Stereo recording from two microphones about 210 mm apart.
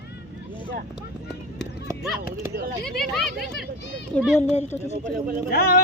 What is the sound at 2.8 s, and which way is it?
Speech, centre (ahead or behind).